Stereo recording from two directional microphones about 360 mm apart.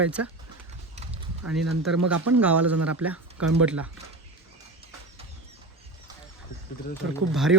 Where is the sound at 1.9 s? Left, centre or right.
Right.